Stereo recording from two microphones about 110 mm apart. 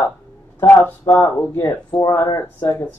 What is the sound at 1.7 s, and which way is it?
Speech, 35° left (ahead or behind).